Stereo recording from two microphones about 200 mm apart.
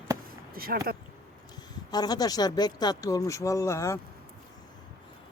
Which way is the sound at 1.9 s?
20° left (ahead or behind).